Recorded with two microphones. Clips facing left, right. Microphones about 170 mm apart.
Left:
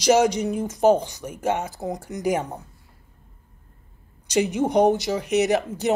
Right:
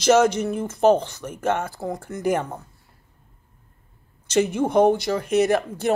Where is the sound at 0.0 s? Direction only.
10° left (ahead or behind).